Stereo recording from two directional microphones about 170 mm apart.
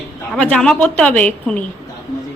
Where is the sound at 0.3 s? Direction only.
5° left (ahead or behind).